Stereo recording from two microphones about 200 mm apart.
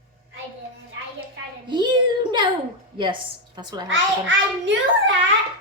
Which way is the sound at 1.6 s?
20° right (ahead or behind).